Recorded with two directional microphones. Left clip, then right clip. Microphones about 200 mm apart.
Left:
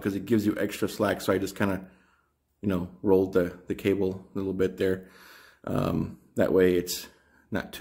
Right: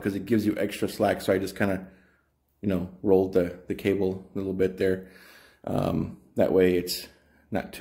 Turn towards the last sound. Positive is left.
turn(degrees=20)  # may be behind; listen again after turning